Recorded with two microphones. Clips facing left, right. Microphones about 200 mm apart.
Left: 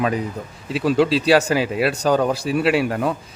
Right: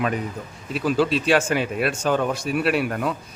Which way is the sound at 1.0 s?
30° left (ahead or behind).